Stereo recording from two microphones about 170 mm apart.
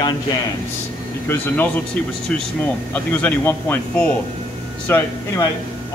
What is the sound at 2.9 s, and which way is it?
Speech, 10° left (ahead or behind).